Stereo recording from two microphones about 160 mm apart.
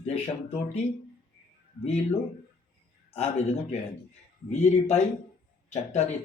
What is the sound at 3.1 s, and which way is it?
Speech, 40° left (ahead or behind).